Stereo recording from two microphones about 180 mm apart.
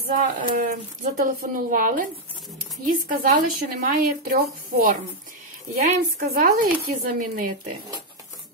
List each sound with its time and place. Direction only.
0.0 s speech: 50° right (ahead or behind)